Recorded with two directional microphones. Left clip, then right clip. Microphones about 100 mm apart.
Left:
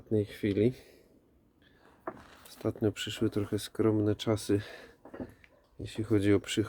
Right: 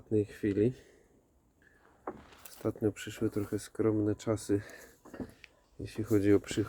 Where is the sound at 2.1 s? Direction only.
20° right (ahead or behind).